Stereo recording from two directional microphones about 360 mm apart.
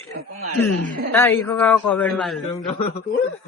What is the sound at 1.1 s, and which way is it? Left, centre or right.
A man's voice, centre.